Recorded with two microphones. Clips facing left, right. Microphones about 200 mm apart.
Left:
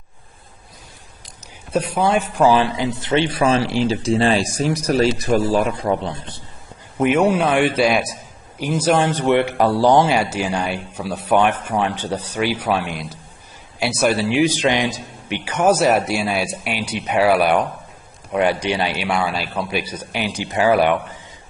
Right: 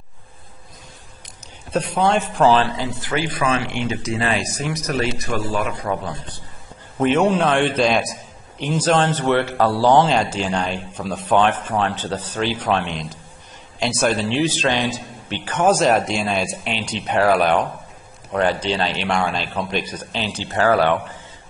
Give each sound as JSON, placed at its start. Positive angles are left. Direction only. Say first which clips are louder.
{"t": 1.7, "sound": "a man's voice", "louder": "left 1 dB", "side_deg": 10}
{"t": 7.0, "sound": "a man's voice", "louder": "left 1 dB", "side_deg": 10}